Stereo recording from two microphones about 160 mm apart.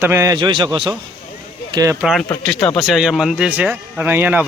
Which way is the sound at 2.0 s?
Centre (ahead or behind).